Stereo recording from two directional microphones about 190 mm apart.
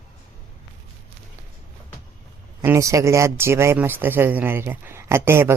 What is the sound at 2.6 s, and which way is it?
Speech, 15° right (ahead or behind).